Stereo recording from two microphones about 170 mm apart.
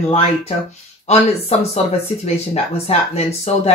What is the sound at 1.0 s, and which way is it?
Speech, 40° left (ahead or behind).